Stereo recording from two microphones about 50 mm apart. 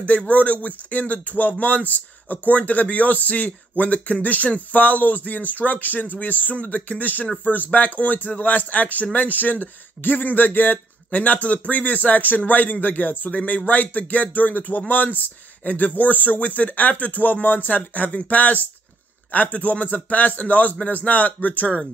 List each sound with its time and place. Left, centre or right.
0.0 s speech: left